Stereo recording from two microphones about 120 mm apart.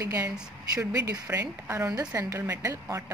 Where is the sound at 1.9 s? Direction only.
30° right (ahead or behind).